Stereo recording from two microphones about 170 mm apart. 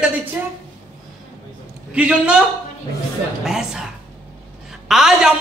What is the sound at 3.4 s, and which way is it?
A man's voice, 5° right (ahead or behind).